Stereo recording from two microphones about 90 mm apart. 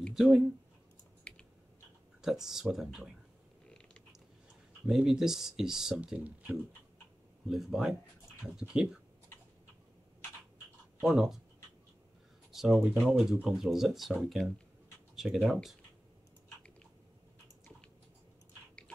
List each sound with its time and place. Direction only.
0.1 s speech: 5° right (ahead or behind)
1.3 s typing: 15° left (ahead or behind)
2.2 s speech: 5° right (ahead or behind)
3.6 s creak: 10° left (ahead or behind)
4.8 s speech: 5° right (ahead or behind)
6.1 s speech: 15° right (ahead or behind)
7.4 s speech: 5° right (ahead or behind)
11.0 s speech: 5° right (ahead or behind)
12.5 s speech: centre (ahead or behind)